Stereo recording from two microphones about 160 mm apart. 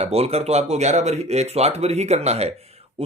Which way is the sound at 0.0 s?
40° right (ahead or behind).